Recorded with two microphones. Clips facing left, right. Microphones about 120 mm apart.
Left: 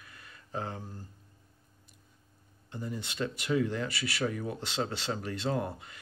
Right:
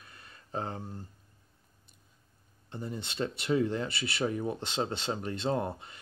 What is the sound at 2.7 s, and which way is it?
Speech, 25° right (ahead or behind).